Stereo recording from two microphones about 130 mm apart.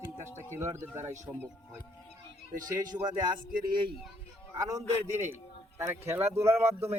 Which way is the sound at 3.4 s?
90° right.